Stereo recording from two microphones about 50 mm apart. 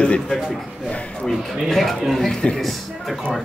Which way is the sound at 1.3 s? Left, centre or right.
Centre.